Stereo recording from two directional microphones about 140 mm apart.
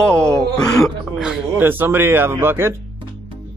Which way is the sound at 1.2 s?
10° right (ahead or behind).